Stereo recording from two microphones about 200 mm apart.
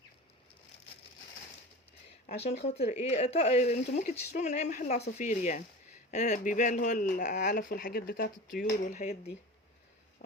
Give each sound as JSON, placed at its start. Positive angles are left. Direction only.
{"t": 2.2, "sound": "speech", "side_deg": 35}